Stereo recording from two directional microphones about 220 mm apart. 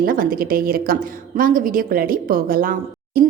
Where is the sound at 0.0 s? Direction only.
40° right (ahead or behind).